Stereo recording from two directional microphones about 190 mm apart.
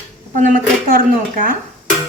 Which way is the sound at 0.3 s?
40° right (ahead or behind).